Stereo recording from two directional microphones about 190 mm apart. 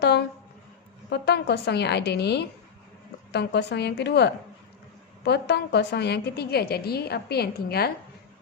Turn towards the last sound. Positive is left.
turn(degrees=55)  # may be behind; listen again after turning